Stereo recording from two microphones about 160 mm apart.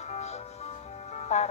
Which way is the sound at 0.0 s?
45° left (ahead or behind).